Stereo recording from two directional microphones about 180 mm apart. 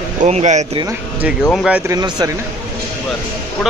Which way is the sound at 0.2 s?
40° right (ahead or behind).